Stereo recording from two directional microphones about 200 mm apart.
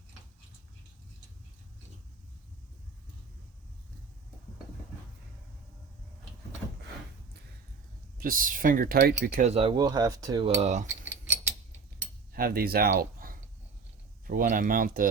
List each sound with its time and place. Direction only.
8.2 s speech: 45° right (ahead or behind)
9.5 s cutlery: 25° right (ahead or behind)
10.5 s cutlery: 35° right (ahead or behind)
12.3 s speech: 45° right (ahead or behind)